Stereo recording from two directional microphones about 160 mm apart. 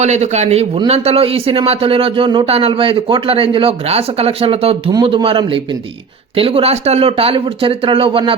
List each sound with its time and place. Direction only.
0.0 s a man's voice: 45° right (ahead or behind)